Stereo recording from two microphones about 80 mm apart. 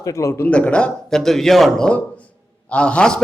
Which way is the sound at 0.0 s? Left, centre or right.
Left.